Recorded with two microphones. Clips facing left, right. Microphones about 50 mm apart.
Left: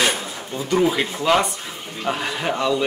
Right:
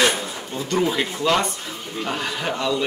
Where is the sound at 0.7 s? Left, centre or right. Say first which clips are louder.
Left 3 dB; centre.